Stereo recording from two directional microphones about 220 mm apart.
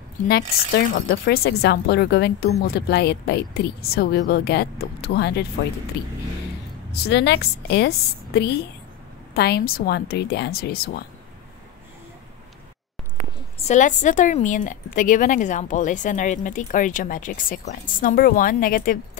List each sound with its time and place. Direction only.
0.3 s a woman's voice: 50° left (ahead or behind)
6.9 s a woman's voice: 50° left (ahead or behind)
9.3 s a woman's voice: 45° left (ahead or behind)
13.7 s a woman's voice: 35° left (ahead or behind)